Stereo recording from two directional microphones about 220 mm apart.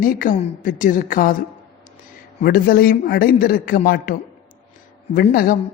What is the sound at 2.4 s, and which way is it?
A woman's voice, 45° left (ahead or behind).